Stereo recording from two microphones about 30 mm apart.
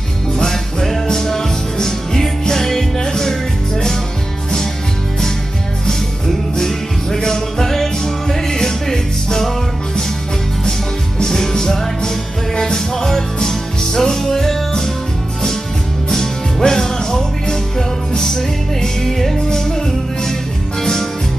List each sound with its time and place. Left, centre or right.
0.5 s music: centre
5.9 s music: centre
11.1 s music: centre
16.1 s music: centre
20.8 s music: centre